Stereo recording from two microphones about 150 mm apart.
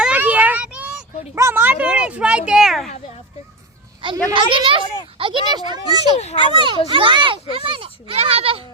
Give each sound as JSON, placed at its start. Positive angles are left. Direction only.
{"t": 0.0, "sound": "child singing", "side_deg": -10}
{"t": 1.4, "sound": "a child's voice", "side_deg": -15}
{"t": 4.0, "sound": "a child's voice", "side_deg": -35}
{"t": 6.1, "sound": "a child's voice", "side_deg": 45}
{"t": 6.4, "sound": "a child's voice", "side_deg": -30}